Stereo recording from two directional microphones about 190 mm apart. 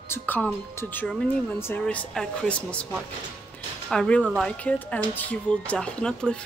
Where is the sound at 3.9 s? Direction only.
5° left (ahead or behind).